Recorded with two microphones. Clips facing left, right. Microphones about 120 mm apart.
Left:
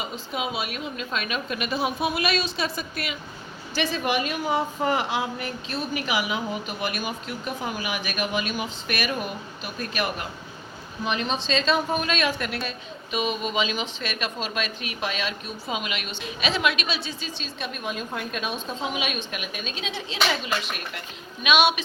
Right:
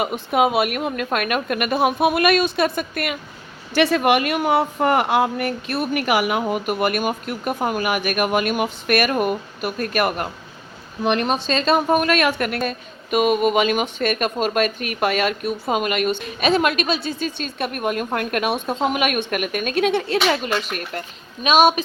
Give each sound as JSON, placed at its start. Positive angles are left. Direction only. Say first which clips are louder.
{"t": 0.0, "sound": "speech", "louder": "right 11 dB", "side_deg": -60}
{"t": 11.4, "sound": "a woman's voice", "louder": "right 4 dB", "side_deg": -50}